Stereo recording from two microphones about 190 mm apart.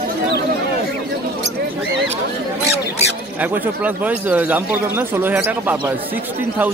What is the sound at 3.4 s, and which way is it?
Speech, 10° right (ahead or behind).